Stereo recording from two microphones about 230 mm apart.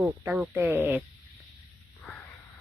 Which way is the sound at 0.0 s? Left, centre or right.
Centre.